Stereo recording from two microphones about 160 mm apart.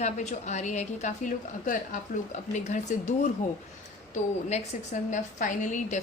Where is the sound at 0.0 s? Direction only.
45° left (ahead or behind).